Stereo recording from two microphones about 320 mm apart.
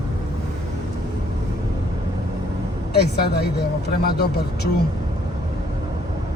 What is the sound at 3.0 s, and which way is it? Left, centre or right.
Speech, left.